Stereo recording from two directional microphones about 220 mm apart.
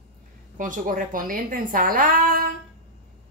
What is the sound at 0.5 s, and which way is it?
A woman's voice, 35° right (ahead or behind).